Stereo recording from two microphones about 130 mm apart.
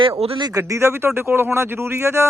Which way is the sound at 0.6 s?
20° right (ahead or behind).